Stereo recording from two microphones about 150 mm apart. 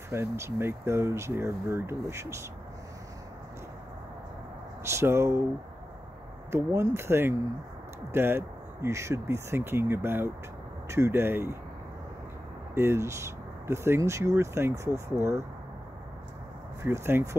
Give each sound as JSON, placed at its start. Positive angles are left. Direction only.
{"t": 0.1, "sound": "speech", "side_deg": -15}
{"t": 4.8, "sound": "speech", "side_deg": -15}
{"t": 6.5, "sound": "speech", "side_deg": -20}
{"t": 12.7, "sound": "speech", "side_deg": -15}
{"t": 16.8, "sound": "speech", "side_deg": -15}